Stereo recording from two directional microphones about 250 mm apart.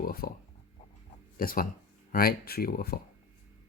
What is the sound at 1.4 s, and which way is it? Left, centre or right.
Speech, left.